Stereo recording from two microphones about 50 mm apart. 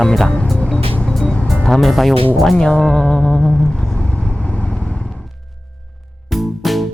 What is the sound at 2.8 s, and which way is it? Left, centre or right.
Music, centre.